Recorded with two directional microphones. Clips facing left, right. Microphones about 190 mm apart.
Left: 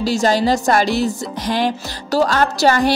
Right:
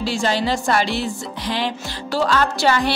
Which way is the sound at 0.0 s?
40° left (ahead or behind).